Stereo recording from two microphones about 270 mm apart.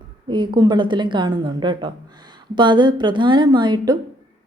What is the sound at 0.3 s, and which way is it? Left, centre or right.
A woman's voice, centre.